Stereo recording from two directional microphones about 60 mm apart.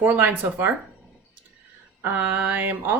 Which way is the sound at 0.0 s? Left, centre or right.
Right.